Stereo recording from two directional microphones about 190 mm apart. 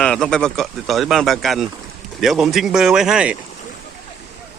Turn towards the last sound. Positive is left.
turn(degrees=-5)  # may be behind; listen again after turning